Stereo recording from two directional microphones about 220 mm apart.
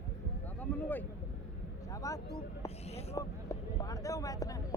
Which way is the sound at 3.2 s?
15° left (ahead or behind).